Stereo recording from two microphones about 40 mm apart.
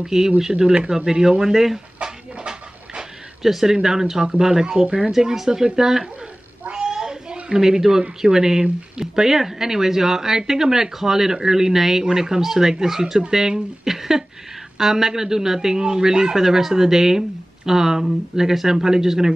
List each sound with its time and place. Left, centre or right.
0.1 s a man's voice: centre
0.5 s a man's voice: right
3.4 s a man's voice: centre; by 5.1 s right
5.1 s a man's voice: centre
6.7 s child singing: right
7.0 s a sound: centre
8.2 s a man's voice: centre